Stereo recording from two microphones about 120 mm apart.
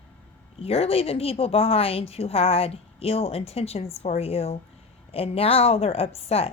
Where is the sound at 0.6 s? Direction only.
55° left (ahead or behind).